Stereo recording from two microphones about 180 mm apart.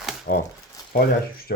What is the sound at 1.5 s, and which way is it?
Speech, 55° left (ahead or behind).